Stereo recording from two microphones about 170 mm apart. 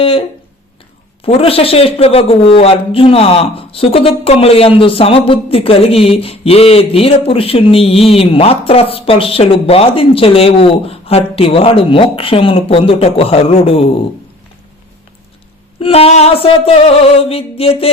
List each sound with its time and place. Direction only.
0.0 s speech: 35° left (ahead or behind)
15.8 s speech: 35° left (ahead or behind)